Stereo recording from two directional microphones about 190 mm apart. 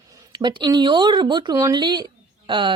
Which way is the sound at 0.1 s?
25° right (ahead or behind).